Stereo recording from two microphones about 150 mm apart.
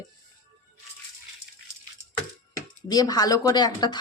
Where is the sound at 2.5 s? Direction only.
25° left (ahead or behind).